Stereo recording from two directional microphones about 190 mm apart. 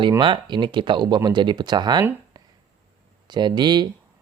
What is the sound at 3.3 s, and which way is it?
Speech, 25° right (ahead or behind).